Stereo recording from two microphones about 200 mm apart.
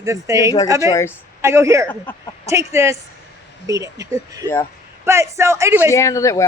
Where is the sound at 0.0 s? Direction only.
15° right (ahead or behind).